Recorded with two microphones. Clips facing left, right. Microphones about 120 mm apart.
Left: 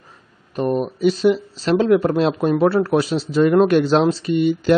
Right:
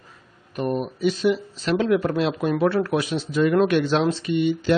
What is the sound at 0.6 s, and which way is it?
A man's voice, 30° left (ahead or behind).